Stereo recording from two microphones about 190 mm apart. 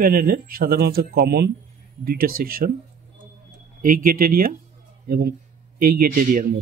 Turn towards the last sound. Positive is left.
turn(degrees=-45)  # may be behind; listen again after turning